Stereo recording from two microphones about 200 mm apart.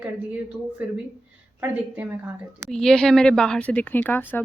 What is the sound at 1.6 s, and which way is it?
A woman's voice, 10° right (ahead or behind).